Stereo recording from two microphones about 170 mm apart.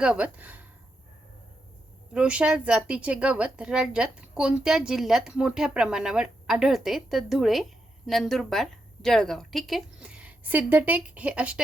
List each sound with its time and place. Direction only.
0.0 s speech: 5° right (ahead or behind)
2.1 s a woman's voice: 5° right (ahead or behind)